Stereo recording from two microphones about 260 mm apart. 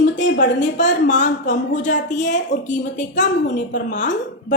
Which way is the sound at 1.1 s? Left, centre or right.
Left.